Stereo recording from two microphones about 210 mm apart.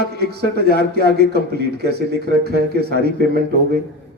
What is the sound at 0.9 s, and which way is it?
Speech, 50° right (ahead or behind).